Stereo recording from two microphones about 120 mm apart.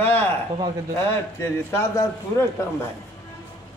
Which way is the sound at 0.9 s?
20° left (ahead or behind).